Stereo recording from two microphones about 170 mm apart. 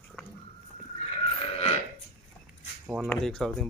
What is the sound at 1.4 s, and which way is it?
Burping, 35° left (ahead or behind).